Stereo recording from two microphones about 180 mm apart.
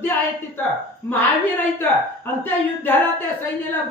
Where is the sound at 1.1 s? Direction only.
10° left (ahead or behind).